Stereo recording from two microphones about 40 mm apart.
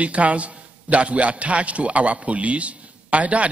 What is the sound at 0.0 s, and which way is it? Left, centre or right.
A man's voice, right.